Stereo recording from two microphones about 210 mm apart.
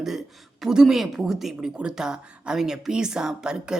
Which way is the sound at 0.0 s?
Centre (ahead or behind).